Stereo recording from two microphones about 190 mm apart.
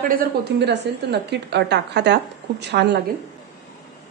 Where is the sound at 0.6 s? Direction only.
65° right (ahead or behind).